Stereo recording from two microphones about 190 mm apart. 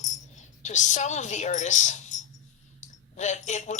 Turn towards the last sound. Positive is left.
turn(degrees=40)  # may be behind; listen again after turning